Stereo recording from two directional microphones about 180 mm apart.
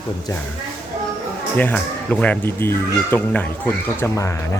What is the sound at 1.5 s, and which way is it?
Speech, 10° left (ahead or behind).